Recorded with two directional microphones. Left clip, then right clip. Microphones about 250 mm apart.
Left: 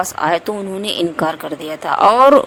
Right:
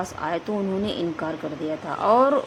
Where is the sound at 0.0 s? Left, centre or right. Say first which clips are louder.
Left 11 dB; left.